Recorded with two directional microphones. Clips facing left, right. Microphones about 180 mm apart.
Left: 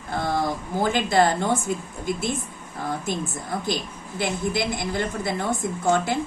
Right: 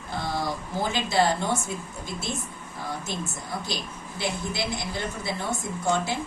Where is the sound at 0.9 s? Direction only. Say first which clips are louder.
Left 3 dB; 50° left (ahead or behind).